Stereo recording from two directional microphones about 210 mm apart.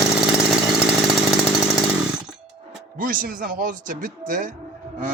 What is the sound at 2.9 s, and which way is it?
Speech, 40° right (ahead or behind).